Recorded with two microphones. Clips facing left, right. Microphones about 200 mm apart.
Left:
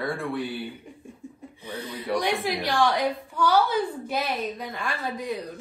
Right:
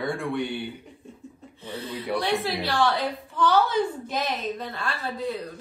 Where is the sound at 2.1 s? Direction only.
15° left (ahead or behind).